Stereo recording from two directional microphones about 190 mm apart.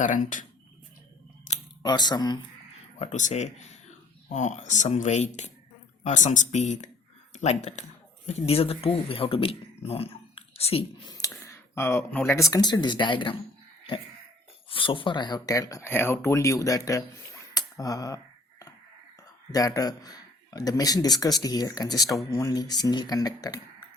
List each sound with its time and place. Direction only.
0.0 s speech: 45° left (ahead or behind)
1.8 s speech: 20° left (ahead or behind)
3.0 s speech: 40° left (ahead or behind)
11.1 s speech: 15° left (ahead or behind)
14.7 s speech: 25° left (ahead or behind)
17.5 s a sound: 20° left (ahead or behind)
19.5 s speech: 20° left (ahead or behind)